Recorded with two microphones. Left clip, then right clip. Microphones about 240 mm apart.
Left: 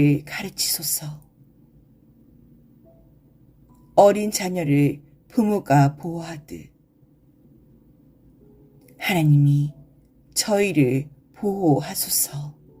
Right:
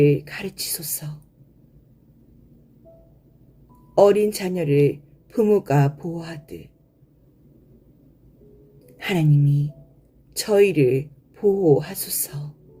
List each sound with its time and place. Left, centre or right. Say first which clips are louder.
0.0 s speech: right 3 dB; left
3.9 s speech: even; left
9.0 s a woman's voice: left 2 dB; left